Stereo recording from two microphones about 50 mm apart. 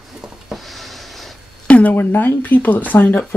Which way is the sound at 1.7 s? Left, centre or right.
Left.